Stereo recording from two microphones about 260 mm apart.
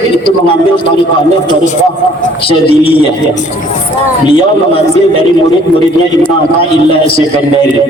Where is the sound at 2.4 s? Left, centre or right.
Left.